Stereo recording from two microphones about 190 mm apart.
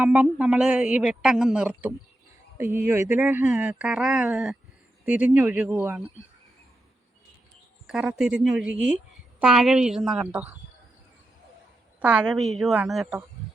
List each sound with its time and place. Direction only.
0.0 s a woman's voice: 10° right (ahead or behind)
7.9 s a woman's voice: 5° right (ahead or behind)
11.9 s a woman's voice: 5° right (ahead or behind)